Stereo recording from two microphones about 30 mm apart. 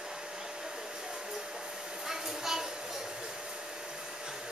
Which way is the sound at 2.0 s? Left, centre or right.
Centre.